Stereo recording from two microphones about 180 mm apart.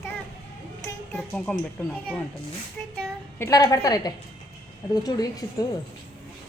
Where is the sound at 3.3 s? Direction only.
15° left (ahead or behind).